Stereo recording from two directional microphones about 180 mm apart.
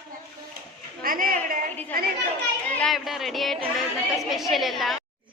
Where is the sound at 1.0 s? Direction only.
50° right (ahead or behind).